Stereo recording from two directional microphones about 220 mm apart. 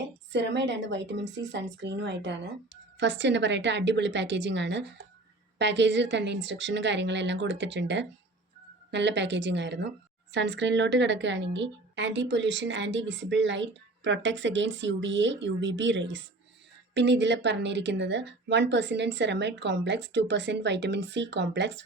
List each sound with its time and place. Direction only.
0.3 s a woman's voice: 55° right (ahead or behind)